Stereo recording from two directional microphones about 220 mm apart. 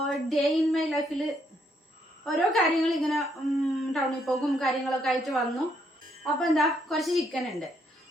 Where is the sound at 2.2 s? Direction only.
Centre (ahead or behind).